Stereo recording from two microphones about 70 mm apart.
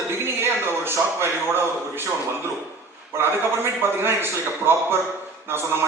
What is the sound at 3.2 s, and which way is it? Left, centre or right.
A man's voice, right.